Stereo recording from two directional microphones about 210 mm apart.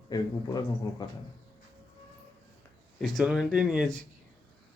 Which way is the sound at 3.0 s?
Centre (ahead or behind).